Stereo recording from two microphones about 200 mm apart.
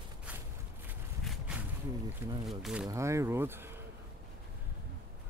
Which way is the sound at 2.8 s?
15° right (ahead or behind).